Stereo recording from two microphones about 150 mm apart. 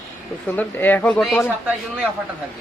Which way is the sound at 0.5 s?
10° left (ahead or behind).